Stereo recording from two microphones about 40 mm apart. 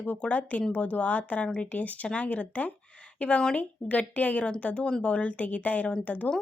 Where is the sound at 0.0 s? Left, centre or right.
Left.